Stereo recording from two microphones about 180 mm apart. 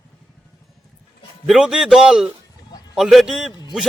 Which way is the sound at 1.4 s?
Centre (ahead or behind).